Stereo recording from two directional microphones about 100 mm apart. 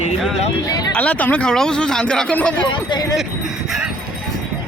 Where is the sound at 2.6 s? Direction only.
50° left (ahead or behind).